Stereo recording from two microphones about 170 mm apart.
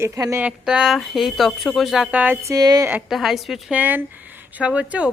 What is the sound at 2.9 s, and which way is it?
Speech, 5° right (ahead or behind).